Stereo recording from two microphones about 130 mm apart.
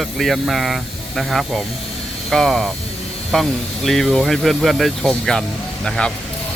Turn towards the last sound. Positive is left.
turn(degrees=5)  # may be behind; listen again after turning